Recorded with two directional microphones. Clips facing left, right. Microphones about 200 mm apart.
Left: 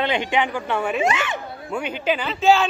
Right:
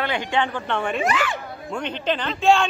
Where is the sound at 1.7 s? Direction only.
10° left (ahead or behind).